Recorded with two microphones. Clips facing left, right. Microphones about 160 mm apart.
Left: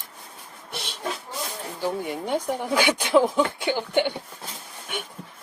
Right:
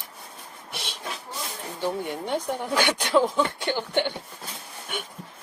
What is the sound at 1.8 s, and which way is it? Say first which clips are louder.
Speech: left 1 dB; 5° left (ahead or behind).